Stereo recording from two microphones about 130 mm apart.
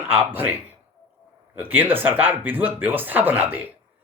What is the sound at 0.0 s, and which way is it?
Speech, 15° right (ahead or behind).